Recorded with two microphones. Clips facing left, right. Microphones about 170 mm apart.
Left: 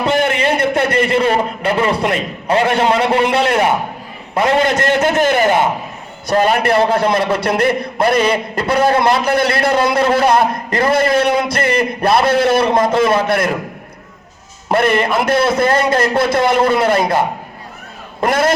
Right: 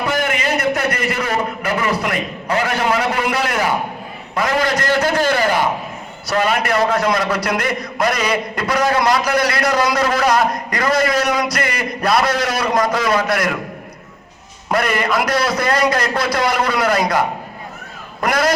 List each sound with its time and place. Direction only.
0.0 s a sound: 25° left (ahead or behind)
4.4 s a man's voice: 25° left (ahead or behind)
6.3 s a man's voice: 35° left (ahead or behind)
14.7 s a man's voice: 25° left (ahead or behind)